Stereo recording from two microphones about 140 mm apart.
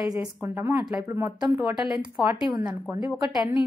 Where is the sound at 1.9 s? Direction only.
5° right (ahead or behind).